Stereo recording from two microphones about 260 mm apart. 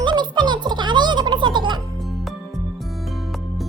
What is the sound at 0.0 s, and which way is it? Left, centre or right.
Music, centre.